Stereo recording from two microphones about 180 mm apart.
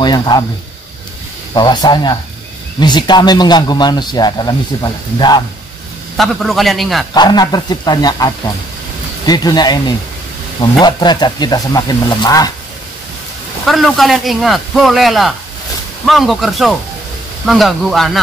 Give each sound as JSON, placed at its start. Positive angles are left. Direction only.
{"t": 0.0, "sound": "a man's voice", "side_deg": 25}
{"t": 1.5, "sound": "a man's voice", "side_deg": 25}
{"t": 6.1, "sound": "speech", "side_deg": 0}
{"t": 7.2, "sound": "a man's voice", "side_deg": 25}
{"t": 13.7, "sound": "speech", "side_deg": 0}